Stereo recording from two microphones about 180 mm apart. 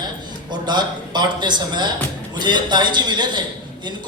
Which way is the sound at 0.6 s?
25° right (ahead or behind).